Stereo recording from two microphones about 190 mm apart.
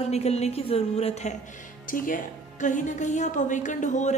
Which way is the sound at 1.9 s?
45° left (ahead or behind).